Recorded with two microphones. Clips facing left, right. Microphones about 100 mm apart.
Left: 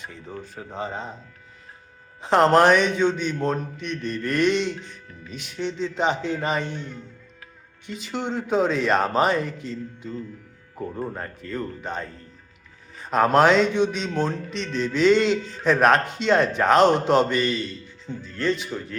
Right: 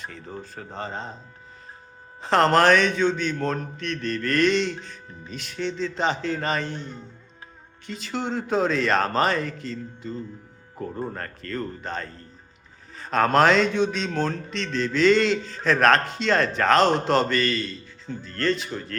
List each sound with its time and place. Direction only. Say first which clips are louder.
0.5 s speech: left 3 dB; 10° left (ahead or behind)
2.2 s speech: left 2 dB; 10° left (ahead or behind)
3.8 s mantra: right 1 dB; 90° right
4.3 s speech: even; 10° left (ahead or behind)
5.8 s speech: left 2 dB; 10° left (ahead or behind)
6.7 s a man's voice: left 1 dB; 25° right (ahead or behind)
7.9 s speech: even; 15° left (ahead or behind)
13.1 s speech: left 1 dB; 10° left (ahead or behind)